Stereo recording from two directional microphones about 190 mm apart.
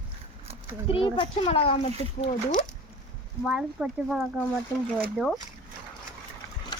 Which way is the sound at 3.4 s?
5° right (ahead or behind).